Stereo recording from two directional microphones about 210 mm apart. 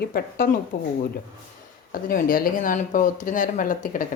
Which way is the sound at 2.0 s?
40° left (ahead or behind).